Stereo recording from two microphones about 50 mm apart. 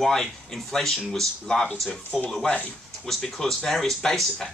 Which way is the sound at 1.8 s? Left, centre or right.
Left.